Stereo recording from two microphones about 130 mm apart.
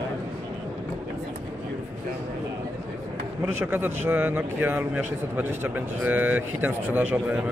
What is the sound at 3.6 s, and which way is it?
Speech, 15° right (ahead or behind).